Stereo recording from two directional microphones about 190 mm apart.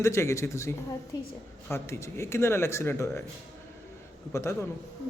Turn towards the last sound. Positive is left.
turn(degrees=15)  # may be behind; listen again after turning